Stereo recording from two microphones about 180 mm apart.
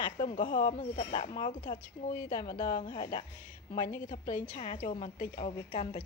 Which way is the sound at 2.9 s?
25° left (ahead or behind).